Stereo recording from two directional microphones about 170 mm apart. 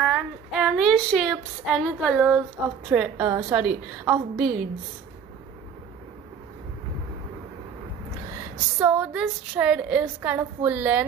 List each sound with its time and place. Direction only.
0.0 s a sound: 5° right (ahead or behind)
2.9 s a woman's voice: 10° right (ahead or behind)
3.3 s a woman's voice: 25° right (ahead or behind)
3.5 s a woman's voice: 10° right (ahead or behind)
8.7 s a woman's voice: 10° right (ahead or behind)